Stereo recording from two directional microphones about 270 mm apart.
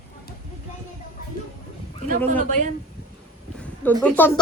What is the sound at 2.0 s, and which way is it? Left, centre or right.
Speech, right.